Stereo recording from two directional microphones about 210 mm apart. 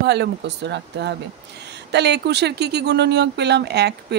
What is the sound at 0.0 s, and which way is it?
Speech, 55° right (ahead or behind).